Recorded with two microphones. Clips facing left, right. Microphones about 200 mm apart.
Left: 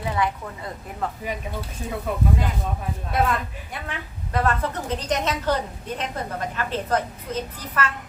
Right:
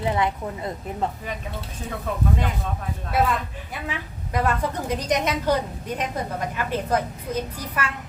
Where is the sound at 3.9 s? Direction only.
10° right (ahead or behind).